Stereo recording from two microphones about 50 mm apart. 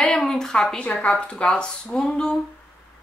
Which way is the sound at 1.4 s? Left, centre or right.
Centre.